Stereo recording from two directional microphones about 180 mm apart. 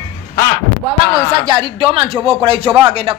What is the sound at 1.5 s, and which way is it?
Speech, 25° right (ahead or behind).